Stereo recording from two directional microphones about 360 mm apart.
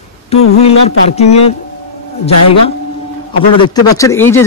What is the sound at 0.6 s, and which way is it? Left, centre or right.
Speech, centre.